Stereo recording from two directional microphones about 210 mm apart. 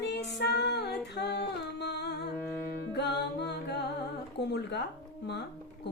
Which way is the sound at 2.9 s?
55° left (ahead or behind).